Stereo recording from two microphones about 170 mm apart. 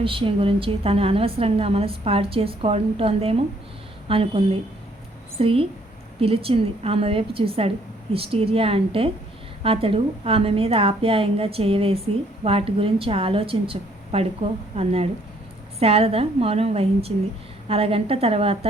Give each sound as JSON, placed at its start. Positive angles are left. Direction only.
{"t": 0.0, "sound": "a woman's voice", "side_deg": -30}